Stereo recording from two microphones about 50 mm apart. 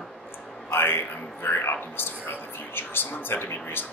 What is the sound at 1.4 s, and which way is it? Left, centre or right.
Speech, left.